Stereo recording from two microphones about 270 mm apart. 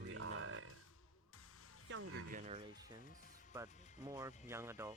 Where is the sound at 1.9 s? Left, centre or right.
Right.